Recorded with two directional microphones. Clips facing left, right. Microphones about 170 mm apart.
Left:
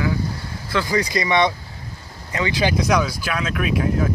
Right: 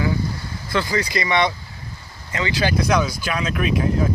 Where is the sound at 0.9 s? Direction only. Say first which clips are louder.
Left 3 dB; 20° left (ahead or behind); by 3.6 s centre (ahead or behind).